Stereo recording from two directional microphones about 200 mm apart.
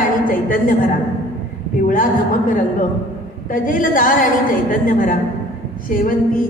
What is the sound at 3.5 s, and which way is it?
A woman's voice, 45° left (ahead or behind).